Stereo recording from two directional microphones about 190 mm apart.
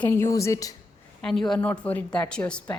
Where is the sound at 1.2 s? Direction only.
Centre (ahead or behind).